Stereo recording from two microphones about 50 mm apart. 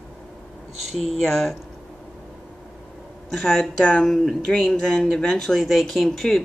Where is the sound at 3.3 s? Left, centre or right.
Centre.